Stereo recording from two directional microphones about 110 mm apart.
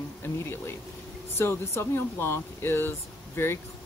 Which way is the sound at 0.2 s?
20° left (ahead or behind).